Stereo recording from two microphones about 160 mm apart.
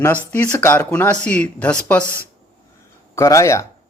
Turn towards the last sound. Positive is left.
turn(degrees=20)  # may be behind; listen again after turning